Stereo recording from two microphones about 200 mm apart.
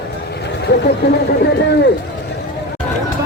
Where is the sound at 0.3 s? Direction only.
55° left (ahead or behind).